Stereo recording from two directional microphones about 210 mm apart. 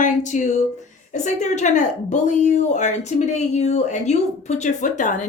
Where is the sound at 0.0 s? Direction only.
35° left (ahead or behind).